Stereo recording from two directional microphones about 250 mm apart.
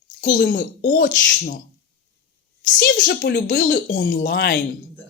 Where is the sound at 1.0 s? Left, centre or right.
Left.